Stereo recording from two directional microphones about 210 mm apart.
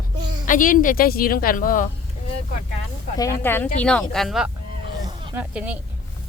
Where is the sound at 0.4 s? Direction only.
40° left (ahead or behind).